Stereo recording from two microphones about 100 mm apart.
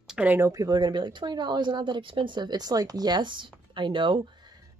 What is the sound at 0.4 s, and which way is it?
Speech, 35° right (ahead or behind).